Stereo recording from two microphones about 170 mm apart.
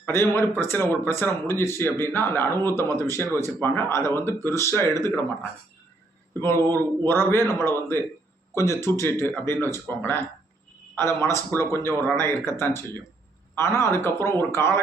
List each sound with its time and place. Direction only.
0.0 s speech: 15° left (ahead or behind)
6.5 s speech: 15° left (ahead or behind)